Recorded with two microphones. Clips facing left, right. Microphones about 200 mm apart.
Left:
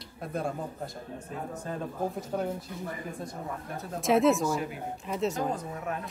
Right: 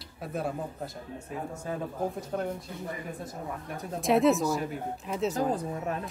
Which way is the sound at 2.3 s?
5° left (ahead or behind).